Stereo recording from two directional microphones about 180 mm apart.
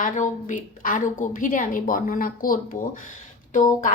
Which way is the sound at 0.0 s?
45° left (ahead or behind).